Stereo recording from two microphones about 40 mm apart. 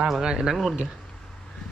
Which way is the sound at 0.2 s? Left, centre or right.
Centre.